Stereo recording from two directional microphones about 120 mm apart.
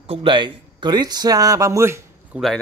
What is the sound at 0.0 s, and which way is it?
Speech, 50° right (ahead or behind).